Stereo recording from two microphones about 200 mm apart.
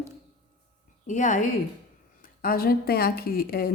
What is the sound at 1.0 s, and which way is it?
A woman's voice, 40° left (ahead or behind).